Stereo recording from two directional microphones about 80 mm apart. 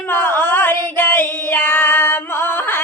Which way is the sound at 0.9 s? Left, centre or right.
Left.